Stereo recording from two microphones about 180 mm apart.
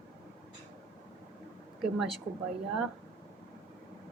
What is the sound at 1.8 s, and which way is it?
Speech, 5° right (ahead or behind).